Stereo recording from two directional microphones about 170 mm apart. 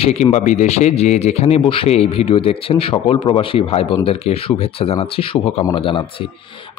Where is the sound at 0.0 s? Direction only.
40° left (ahead or behind).